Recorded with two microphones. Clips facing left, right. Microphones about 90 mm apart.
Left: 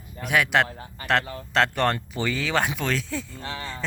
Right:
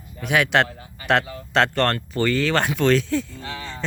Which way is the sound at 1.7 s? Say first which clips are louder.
Right 2 dB; 10° left (ahead or behind).